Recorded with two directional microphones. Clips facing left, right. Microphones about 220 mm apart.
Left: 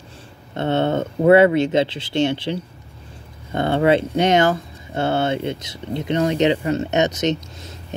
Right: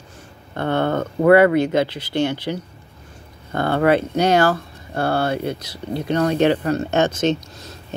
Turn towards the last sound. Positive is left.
turn(degrees=20)  # may be behind; listen again after turning